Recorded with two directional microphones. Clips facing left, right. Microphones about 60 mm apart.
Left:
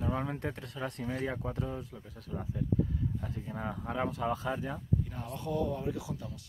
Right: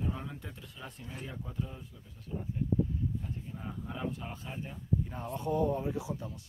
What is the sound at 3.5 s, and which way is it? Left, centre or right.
Speech, left.